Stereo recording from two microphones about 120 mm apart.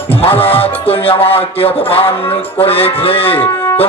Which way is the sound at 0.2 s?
55° left (ahead or behind).